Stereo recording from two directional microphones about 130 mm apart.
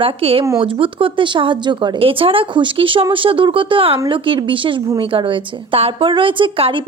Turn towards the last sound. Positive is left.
turn(degrees=-45)  # may be behind; listen again after turning